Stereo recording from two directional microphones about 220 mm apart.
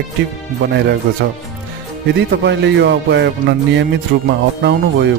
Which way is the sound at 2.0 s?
50° right (ahead or behind).